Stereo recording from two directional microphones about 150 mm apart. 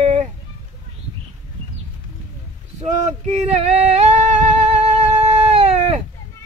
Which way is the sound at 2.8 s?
50° right (ahead or behind).